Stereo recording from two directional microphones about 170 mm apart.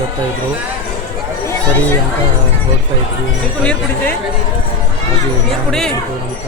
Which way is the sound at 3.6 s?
10° left (ahead or behind).